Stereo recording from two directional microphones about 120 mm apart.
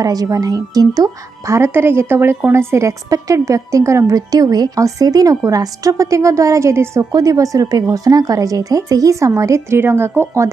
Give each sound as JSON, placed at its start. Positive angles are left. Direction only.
{"t": 0.0, "sound": "speech", "side_deg": -30}